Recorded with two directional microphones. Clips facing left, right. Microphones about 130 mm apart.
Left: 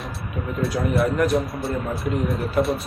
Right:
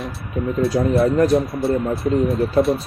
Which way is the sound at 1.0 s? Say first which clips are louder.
Right 4 dB; 30° right (ahead or behind).